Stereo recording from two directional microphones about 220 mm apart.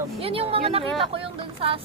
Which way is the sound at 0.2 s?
25° right (ahead or behind).